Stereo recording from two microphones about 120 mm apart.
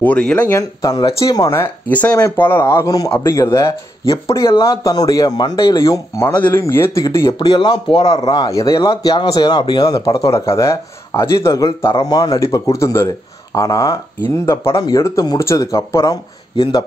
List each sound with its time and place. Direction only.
0.0 s speech: 10° left (ahead or behind)
0.6 s a man's voice: 30° left (ahead or behind)
5.8 s a man's voice: 25° left (ahead or behind)
7.3 s speech: 40° left (ahead or behind)
8.0 s speech: 55° left (ahead or behind)
8.3 s a man's voice: 30° left (ahead or behind)